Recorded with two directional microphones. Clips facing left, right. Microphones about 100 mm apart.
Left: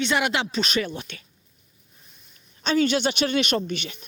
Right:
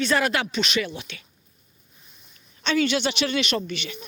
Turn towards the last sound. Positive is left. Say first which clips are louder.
# left 2 dB
turn(degrees=45)  # may be behind; listen again after turning